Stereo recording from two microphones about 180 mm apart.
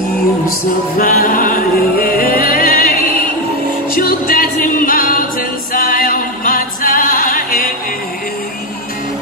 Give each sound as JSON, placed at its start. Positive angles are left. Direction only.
{"t": 0.9, "sound": "music", "side_deg": 50}